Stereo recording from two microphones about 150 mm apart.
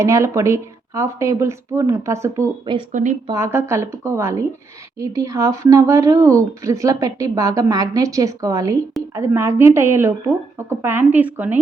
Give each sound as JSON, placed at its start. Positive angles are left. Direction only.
{"t": 0.0, "sound": "speech", "side_deg": -20}
{"t": 2.9, "sound": "speech", "side_deg": -55}
{"t": 3.3, "sound": "a woman's voice", "side_deg": -15}